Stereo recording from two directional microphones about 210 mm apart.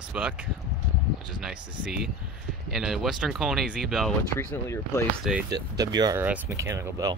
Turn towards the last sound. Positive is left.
turn(degrees=-15)  # may be behind; listen again after turning